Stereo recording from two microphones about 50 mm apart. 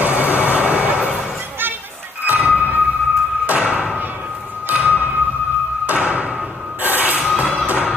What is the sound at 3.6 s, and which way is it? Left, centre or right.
Thump, centre.